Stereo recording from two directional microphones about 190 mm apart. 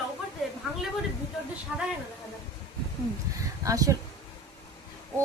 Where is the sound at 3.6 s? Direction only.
15° right (ahead or behind).